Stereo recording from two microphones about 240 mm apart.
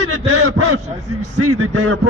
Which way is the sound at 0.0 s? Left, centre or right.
Right.